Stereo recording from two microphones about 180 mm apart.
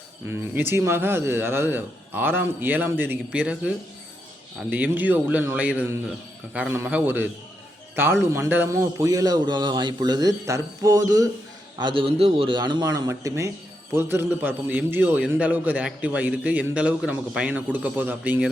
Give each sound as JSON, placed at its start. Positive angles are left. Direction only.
{"t": 0.3, "sound": "a man's voice", "side_deg": -10}
{"t": 4.7, "sound": "a man's voice", "side_deg": -10}